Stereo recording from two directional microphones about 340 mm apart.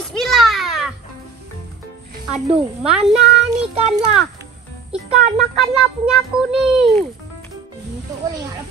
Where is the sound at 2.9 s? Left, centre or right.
Centre.